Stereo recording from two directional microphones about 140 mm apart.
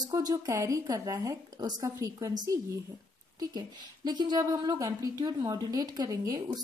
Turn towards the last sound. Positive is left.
turn(degrees=-25)  # may be behind; listen again after turning